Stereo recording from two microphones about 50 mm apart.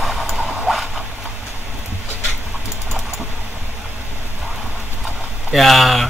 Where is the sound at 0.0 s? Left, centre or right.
Centre.